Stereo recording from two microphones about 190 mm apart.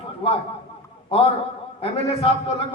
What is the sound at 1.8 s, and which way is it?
Speech, 30° left (ahead or behind).